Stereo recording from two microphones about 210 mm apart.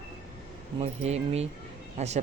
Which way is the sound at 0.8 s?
30° right (ahead or behind).